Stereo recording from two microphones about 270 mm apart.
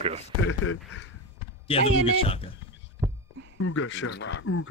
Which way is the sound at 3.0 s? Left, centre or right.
Centre.